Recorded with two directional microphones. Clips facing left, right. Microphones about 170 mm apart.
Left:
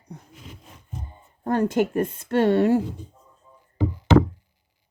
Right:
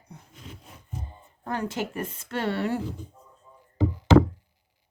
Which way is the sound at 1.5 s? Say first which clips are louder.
Left 9 dB; 50° left (ahead or behind).